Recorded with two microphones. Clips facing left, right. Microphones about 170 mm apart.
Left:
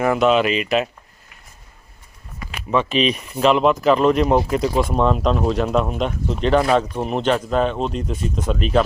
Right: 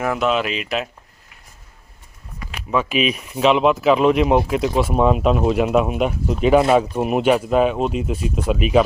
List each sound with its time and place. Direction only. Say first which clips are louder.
0.0 s speech: left 4 dB; centre (ahead or behind)
2.6 s speech: left 1 dB; 5° right (ahead or behind)